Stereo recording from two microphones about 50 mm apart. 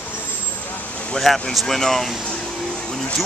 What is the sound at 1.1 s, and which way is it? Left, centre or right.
Speech, centre.